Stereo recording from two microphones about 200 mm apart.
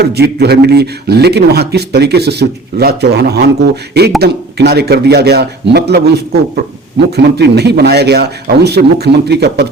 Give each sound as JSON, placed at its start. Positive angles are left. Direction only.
{"t": 0.0, "sound": "speech", "side_deg": -55}